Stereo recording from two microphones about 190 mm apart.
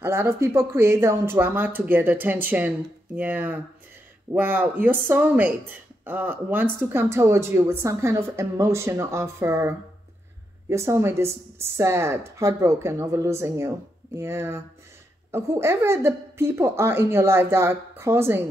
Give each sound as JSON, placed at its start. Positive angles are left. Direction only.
{"t": 0.0, "sound": "speech", "side_deg": -15}